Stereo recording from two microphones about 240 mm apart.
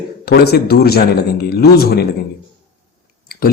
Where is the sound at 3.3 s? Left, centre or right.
Left.